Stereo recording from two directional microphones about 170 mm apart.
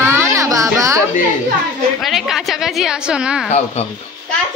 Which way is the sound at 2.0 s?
Centre (ahead or behind).